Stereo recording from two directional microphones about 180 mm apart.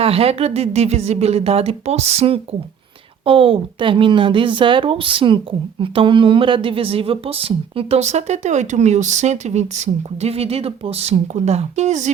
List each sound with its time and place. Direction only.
0.0 s speech: 35° right (ahead or behind)